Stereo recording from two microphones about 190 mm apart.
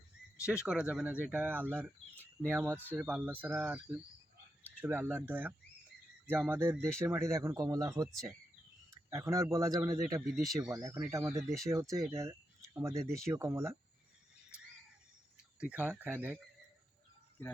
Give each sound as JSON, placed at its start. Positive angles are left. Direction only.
{"t": 0.4, "sound": "speech", "side_deg": -5}
{"t": 15.6, "sound": "speech", "side_deg": -10}